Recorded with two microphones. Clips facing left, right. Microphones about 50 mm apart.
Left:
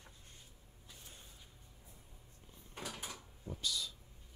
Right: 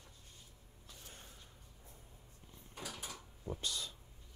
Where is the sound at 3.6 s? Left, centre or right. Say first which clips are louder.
Left 5 dB; right.